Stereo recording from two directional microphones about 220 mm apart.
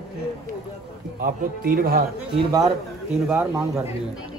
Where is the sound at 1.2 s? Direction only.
40° right (ahead or behind).